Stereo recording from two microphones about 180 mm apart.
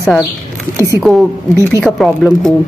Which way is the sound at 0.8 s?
15° right (ahead or behind).